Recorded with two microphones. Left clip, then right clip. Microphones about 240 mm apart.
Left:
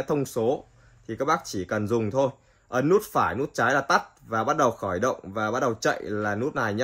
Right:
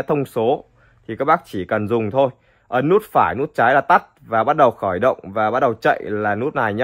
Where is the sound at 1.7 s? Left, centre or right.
Right.